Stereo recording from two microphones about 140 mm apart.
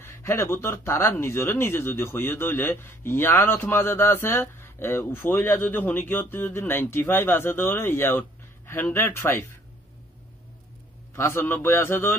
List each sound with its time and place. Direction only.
0.0 s speech: 20° left (ahead or behind)
11.1 s speech: 20° left (ahead or behind)